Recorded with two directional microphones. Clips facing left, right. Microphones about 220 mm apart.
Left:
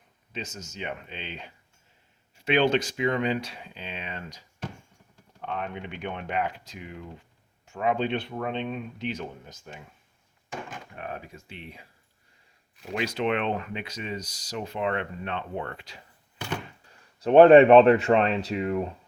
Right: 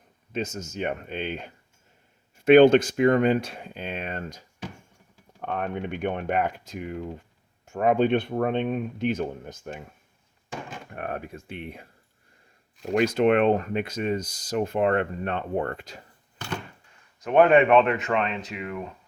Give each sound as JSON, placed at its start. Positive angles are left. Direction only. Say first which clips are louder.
{"t": 0.3, "sound": "speech", "louder": "right 7 dB", "side_deg": -50}
{"t": 10.9, "sound": "speech", "louder": "right 6 dB", "side_deg": -55}
{"t": 17.2, "sound": "speech", "louder": "left 4 dB", "side_deg": 30}